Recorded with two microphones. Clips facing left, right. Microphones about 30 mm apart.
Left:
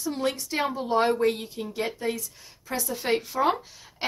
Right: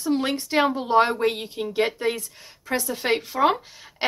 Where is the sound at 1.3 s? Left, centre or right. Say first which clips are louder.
Right 6 dB; right.